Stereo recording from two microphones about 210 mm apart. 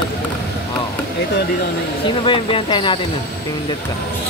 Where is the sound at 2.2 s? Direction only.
25° left (ahead or behind).